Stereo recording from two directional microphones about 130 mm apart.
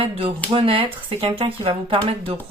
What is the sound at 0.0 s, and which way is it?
Speech, 45° right (ahead or behind).